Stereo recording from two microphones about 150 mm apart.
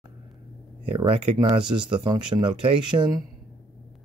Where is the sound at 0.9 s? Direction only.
35° right (ahead or behind).